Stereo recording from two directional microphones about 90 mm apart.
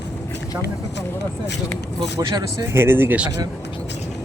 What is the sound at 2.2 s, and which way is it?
Speech, 40° right (ahead or behind).